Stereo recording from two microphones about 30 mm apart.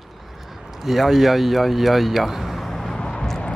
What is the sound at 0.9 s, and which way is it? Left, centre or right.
Speech, centre.